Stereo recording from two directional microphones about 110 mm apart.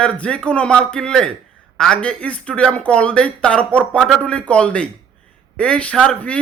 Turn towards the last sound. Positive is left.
turn(degrees=10)  # may be behind; listen again after turning